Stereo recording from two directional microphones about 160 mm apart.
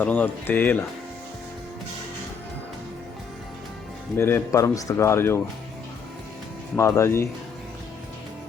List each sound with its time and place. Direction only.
0.0 s speech: 10° left (ahead or behind)
4.2 s speech: 15° left (ahead or behind)
6.7 s speech: 20° left (ahead or behind)